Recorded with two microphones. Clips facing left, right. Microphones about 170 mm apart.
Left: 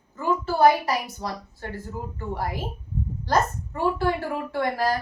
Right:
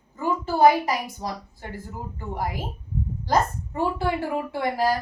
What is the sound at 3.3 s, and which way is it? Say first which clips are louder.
A woman's voice: even; 20° right (ahead or behind).